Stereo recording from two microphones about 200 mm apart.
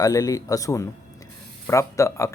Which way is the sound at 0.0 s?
15° left (ahead or behind).